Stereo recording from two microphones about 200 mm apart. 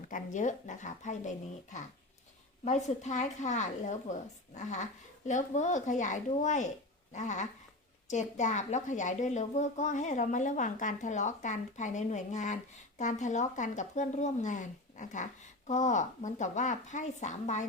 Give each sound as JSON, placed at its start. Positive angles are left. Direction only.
{"t": 0.1, "sound": "speech", "side_deg": 40}
{"t": 2.6, "sound": "speech", "side_deg": 35}